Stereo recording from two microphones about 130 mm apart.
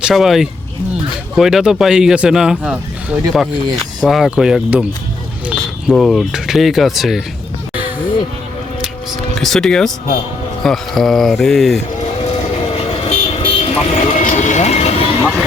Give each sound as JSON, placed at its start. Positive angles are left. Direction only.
{"t": 0.0, "sound": "speech", "side_deg": 0}
{"t": 5.5, "sound": "a sound", "side_deg": -5}
{"t": 6.1, "sound": "speech", "side_deg": 0}
{"t": 9.3, "sound": "speech", "side_deg": 0}
{"t": 12.7, "sound": "vehicle", "side_deg": 45}